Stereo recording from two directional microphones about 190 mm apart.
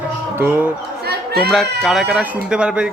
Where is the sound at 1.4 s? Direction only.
Centre (ahead or behind).